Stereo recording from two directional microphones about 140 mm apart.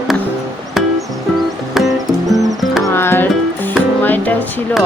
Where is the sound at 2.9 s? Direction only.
15° left (ahead or behind).